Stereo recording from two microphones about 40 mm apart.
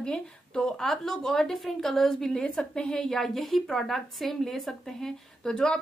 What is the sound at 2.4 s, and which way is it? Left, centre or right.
Speech, left.